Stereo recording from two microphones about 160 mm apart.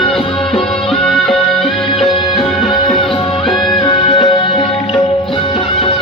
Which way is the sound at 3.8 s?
30° left (ahead or behind).